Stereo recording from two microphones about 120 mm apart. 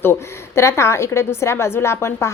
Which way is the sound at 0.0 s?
20° left (ahead or behind).